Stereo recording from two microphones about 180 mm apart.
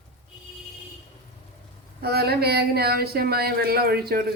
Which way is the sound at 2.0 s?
60° right (ahead or behind).